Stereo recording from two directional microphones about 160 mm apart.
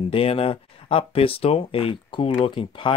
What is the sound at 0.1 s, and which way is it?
Speech, 35° left (ahead or behind).